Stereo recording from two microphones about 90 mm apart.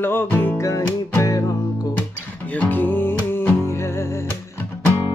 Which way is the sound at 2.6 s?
20° left (ahead or behind).